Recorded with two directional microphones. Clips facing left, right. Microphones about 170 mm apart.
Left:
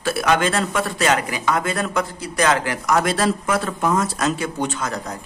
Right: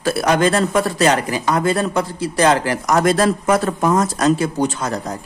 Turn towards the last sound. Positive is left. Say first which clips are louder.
# right 4 dB
turn(degrees=-35)  # may be behind; listen again after turning